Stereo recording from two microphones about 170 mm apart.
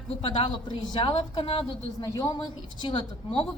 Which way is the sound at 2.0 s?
20° left (ahead or behind).